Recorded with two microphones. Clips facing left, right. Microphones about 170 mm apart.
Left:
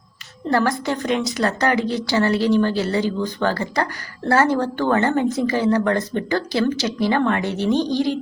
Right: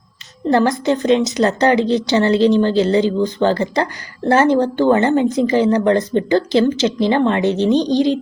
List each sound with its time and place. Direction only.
0.5 s a woman's voice: 20° right (ahead or behind)